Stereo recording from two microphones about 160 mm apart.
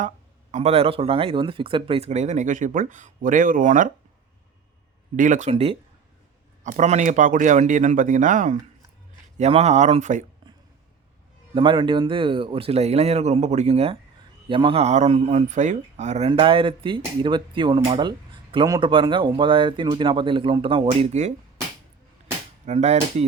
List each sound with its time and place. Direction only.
0.5 s speech: 40° right (ahead or behind)
5.1 s speech: 55° right (ahead or behind)
5.5 s speech: 40° right (ahead or behind)
9.4 s speech: 40° right (ahead or behind)
11.5 s speech: 30° right (ahead or behind)
22.6 s speech: 45° right (ahead or behind)